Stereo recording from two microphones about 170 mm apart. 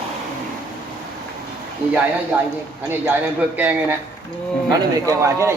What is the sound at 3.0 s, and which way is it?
Speech, 10° right (ahead or behind).